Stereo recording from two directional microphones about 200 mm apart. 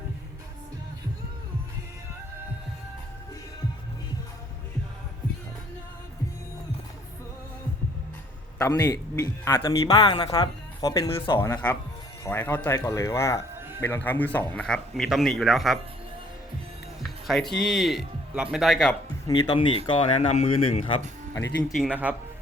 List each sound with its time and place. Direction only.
8.5 s speech: 15° left (ahead or behind); by 15.8 s centre (ahead or behind)
17.0 s speech: centre (ahead or behind)
19.3 s speech: 25° left (ahead or behind)
21.8 s a man's voice: 5° right (ahead or behind)